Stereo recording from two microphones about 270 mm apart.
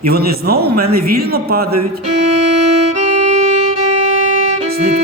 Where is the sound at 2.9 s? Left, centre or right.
Right.